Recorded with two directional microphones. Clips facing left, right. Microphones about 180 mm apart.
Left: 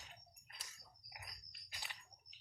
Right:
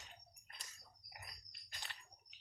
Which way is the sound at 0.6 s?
5° left (ahead or behind).